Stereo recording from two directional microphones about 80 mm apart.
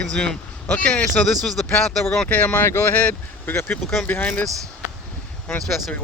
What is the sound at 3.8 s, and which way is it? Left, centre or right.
Speech, centre.